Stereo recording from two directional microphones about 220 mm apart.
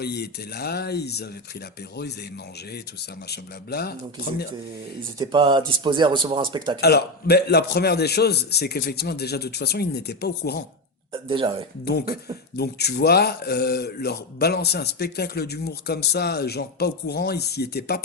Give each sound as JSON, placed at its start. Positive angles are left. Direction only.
{"t": 0.0, "sound": "speech", "side_deg": 45}
{"t": 3.2, "sound": "speech", "side_deg": 45}
{"t": 5.2, "sound": "a man's voice", "side_deg": -20}
{"t": 6.8, "sound": "speech", "side_deg": 45}
{"t": 11.1, "sound": "a man's voice", "side_deg": -25}
{"t": 11.9, "sound": "speech", "side_deg": 45}